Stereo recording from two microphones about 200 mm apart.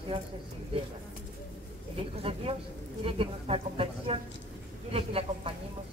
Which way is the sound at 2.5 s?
25° right (ahead or behind).